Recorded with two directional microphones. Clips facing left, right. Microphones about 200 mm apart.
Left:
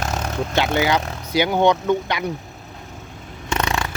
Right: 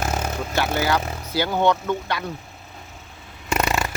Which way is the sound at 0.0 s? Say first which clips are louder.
Even; 5° right (ahead or behind).